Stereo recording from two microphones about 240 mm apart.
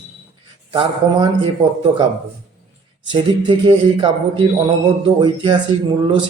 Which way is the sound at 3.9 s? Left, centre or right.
Centre.